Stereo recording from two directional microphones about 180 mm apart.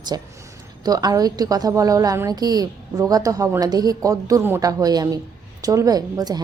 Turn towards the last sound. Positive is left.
turn(degrees=-20)  # may be behind; listen again after turning